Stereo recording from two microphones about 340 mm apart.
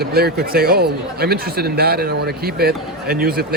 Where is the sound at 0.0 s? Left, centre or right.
Right.